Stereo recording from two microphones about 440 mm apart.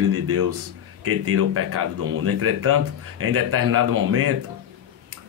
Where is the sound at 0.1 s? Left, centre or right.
Right.